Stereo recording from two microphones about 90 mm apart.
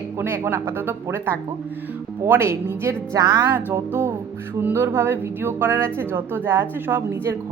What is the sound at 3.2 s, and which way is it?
Speech, 50° right (ahead or behind).